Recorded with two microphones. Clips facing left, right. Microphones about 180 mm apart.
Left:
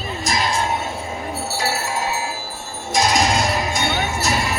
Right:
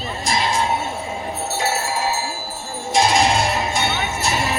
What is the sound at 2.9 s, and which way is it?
Music, 40° left (ahead or behind).